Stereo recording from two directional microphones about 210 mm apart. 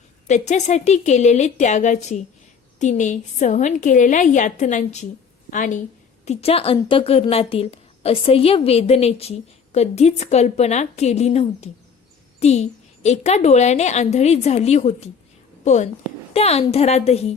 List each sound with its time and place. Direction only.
0.3 s a woman's voice: 35° left (ahead or behind)